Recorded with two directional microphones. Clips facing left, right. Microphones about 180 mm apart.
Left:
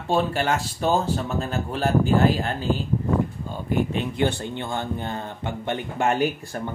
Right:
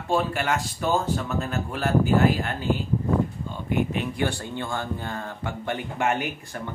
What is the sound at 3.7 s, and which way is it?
Speech, 30° left (ahead or behind).